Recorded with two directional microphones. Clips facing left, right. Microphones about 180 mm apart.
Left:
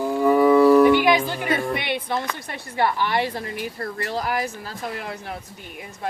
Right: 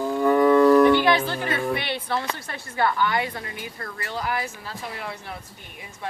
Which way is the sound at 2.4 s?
15° left (ahead or behind).